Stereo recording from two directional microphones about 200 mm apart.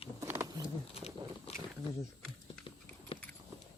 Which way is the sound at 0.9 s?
30° left (ahead or behind).